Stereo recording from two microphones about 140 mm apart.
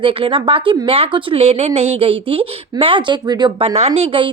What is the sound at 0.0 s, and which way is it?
A woman's voice, 40° right (ahead or behind).